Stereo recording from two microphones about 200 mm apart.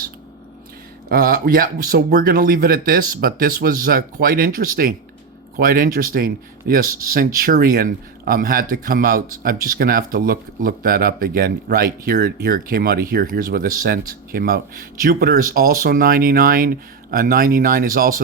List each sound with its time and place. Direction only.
1.1 s speech: 45° right (ahead or behind)